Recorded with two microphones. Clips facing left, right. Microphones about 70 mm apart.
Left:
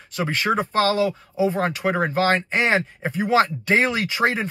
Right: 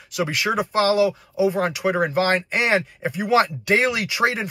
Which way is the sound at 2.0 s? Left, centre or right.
Left.